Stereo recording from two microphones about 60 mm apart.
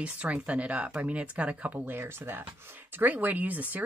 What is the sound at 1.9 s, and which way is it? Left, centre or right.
Speech, right.